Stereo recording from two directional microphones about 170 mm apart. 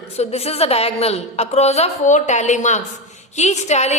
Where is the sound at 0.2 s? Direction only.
40° left (ahead or behind).